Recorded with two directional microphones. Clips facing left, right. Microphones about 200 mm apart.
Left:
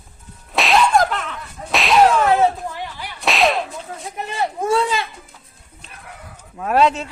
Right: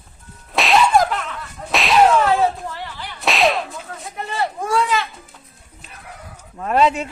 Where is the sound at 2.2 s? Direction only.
15° left (ahead or behind).